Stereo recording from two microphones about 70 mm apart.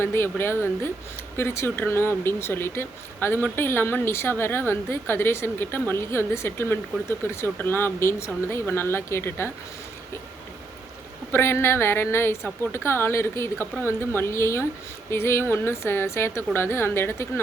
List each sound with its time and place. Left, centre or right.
0.0 s speech: left
11.3 s speech: left